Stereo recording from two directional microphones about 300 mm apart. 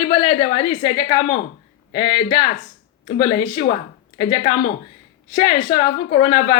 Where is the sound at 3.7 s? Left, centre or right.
Centre.